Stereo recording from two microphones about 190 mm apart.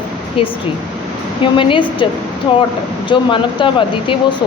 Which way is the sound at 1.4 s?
25° left (ahead or behind).